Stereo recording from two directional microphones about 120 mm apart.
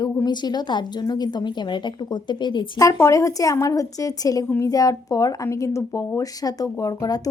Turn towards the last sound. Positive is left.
turn(degrees=30)  # may be behind; listen again after turning